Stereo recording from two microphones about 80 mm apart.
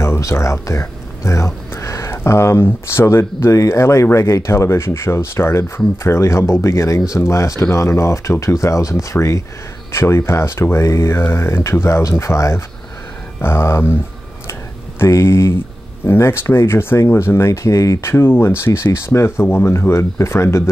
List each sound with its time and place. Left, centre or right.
0.0 s speech: left
14.5 s a sound: left
16.1 s speech: left